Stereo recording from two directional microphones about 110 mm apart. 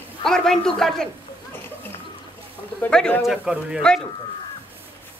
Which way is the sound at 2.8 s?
10° left (ahead or behind).